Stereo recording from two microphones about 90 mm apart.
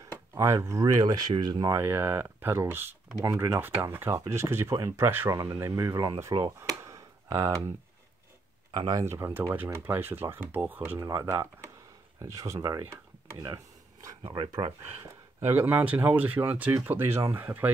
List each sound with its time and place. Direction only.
0.3 s speech: 30° right (ahead or behind)
1.0 s speech: 50° right (ahead or behind)
1.8 s speech: 25° right (ahead or behind)
5.3 s speech: 40° right (ahead or behind)
6.8 s tick-tock: 35° right (ahead or behind)
8.7 s speech: 50° right (ahead or behind)
9.0 s speech: 30° right (ahead or behind)
11.0 s speech: 40° right (ahead or behind)
12.8 s a sound: 30° right (ahead or behind)
14.2 s speech: 60° right (ahead or behind)
15.5 s speech: 25° right (ahead or behind)